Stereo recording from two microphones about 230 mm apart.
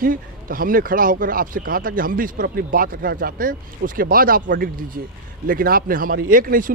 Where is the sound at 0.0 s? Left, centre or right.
Right.